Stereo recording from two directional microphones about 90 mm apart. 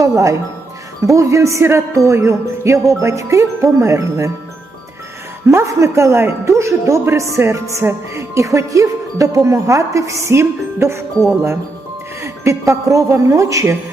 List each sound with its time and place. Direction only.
0.0 s speech: 35° right (ahead or behind)
5.5 s speech: 30° right (ahead or behind)
12.2 s speech: 35° right (ahead or behind)